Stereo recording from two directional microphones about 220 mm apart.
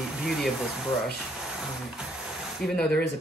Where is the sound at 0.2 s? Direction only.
Centre (ahead or behind).